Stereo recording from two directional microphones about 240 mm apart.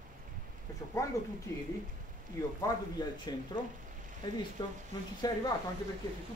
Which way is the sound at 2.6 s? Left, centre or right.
Centre.